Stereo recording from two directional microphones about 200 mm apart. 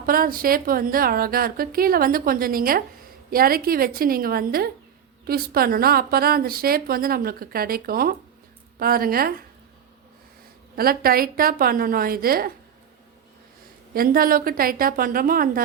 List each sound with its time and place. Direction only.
0.0 s a woman's voice: 45° right (ahead or behind)
10.8 s a woman's voice: 50° right (ahead or behind)
13.9 s a woman's voice: 45° right (ahead or behind)